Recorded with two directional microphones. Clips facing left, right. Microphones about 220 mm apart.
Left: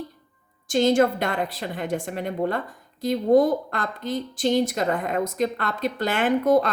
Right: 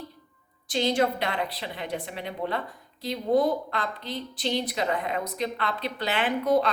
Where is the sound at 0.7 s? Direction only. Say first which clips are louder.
Left 6 dB; 45° left (ahead or behind).